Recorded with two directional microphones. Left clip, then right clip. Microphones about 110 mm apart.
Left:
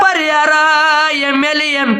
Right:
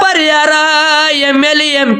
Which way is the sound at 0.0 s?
30° right (ahead or behind).